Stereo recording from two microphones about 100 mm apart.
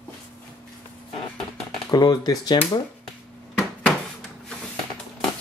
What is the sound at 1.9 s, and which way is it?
Speech, 40° left (ahead or behind).